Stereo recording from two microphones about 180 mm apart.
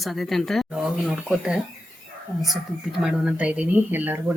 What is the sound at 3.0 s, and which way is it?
Speech, 5° right (ahead or behind).